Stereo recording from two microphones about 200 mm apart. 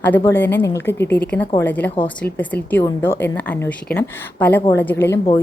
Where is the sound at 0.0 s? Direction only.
10° left (ahead or behind).